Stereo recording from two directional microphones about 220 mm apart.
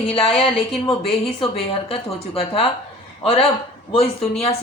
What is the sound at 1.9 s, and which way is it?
Speech, 25° left (ahead or behind).